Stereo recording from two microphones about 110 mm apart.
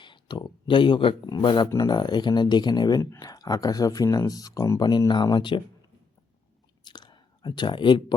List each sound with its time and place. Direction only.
0.0 s speech: 45° left (ahead or behind)
1.6 s speech: 35° left (ahead or behind)
3.0 s speech: 30° left (ahead or behind); by 5.6 s 45° left (ahead or behind)
6.8 s clicking: 40° left (ahead or behind)